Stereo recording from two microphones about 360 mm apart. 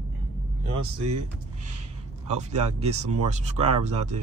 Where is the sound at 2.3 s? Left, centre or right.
Centre.